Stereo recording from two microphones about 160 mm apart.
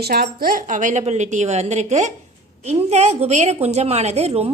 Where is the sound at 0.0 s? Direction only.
75° right (ahead or behind).